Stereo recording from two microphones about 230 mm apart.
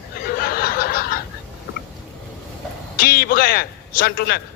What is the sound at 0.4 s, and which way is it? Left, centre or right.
Snicker, left.